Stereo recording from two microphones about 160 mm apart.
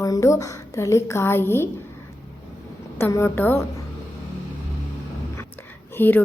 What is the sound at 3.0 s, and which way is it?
Speech, 15° left (ahead or behind).